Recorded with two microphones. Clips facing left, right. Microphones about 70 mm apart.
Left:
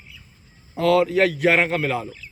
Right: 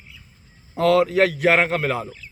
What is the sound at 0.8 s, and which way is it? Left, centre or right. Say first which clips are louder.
A man's voice: right 1 dB; right.